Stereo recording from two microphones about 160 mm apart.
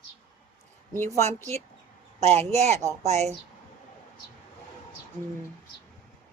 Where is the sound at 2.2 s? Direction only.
45° right (ahead or behind).